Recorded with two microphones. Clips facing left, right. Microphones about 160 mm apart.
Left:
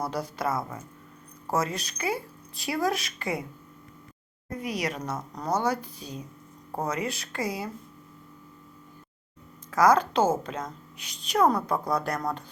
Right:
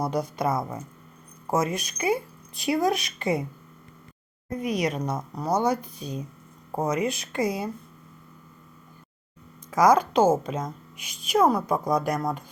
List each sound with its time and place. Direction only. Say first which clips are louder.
0.0 s speech: right 4 dB; 20° right (ahead or behind)
4.6 s speech: right 5 dB; 20° right (ahead or behind)
9.7 s speech: right 2 dB; 15° right (ahead or behind)